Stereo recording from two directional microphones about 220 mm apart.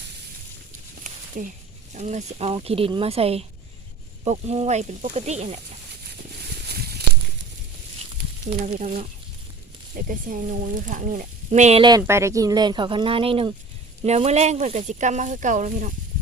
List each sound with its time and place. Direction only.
1.4 s speech: 35° right (ahead or behind)
8.6 s speech: 35° right (ahead or behind)
10.1 s speech: 40° right (ahead or behind)